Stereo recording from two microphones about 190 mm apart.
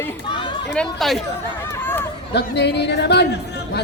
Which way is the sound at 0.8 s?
Centre (ahead or behind).